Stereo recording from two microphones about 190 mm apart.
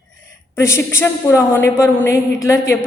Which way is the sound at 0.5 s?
15° left (ahead or behind).